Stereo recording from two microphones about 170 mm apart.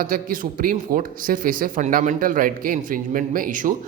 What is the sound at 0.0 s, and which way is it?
A man's voice, 55° right (ahead or behind).